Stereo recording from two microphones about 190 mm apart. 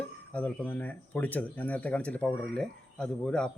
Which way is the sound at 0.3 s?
10° left (ahead or behind).